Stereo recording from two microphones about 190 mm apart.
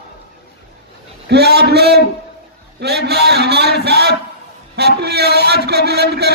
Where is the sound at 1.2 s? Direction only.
60° right (ahead or behind).